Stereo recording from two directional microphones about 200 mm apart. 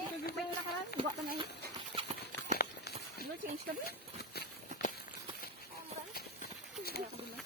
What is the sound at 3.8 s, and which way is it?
Clip-clop, 50° left (ahead or behind).